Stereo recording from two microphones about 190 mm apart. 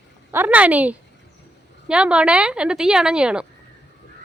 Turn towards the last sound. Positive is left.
turn(degrees=-5)  # may be behind; listen again after turning